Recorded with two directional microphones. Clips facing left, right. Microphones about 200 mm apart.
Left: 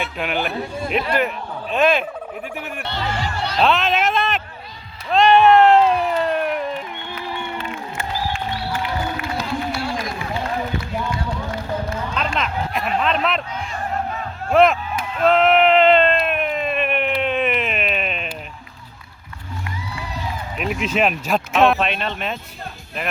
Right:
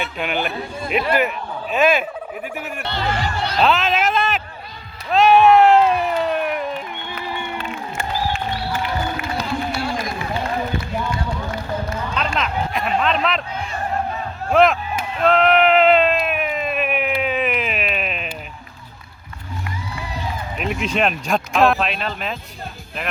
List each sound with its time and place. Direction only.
0.0 s speech: centre (ahead or behind)
5.1 s cat: 5° right (ahead or behind)
9.4 s run: 5° left (ahead or behind)
12.1 s a sound: centre (ahead or behind)
14.5 s speech: centre (ahead or behind)
15.2 s a sound: centre (ahead or behind)
20.6 s speech: centre (ahead or behind)